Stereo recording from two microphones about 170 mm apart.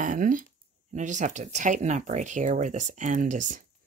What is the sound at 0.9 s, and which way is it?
Speech, 45° right (ahead or behind).